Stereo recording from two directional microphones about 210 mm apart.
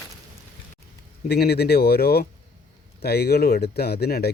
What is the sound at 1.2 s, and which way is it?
Speech, 50° left (ahead or behind).